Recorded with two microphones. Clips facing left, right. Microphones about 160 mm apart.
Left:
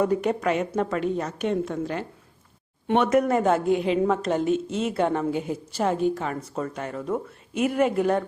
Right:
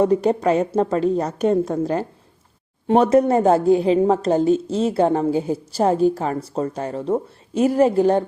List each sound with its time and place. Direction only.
0.0 s a woman's voice: 30° right (ahead or behind)